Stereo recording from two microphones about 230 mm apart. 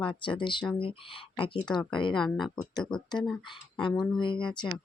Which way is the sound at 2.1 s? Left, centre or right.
Centre.